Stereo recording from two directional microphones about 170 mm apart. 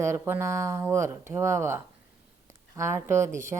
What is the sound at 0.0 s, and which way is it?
Speech, 15° right (ahead or behind).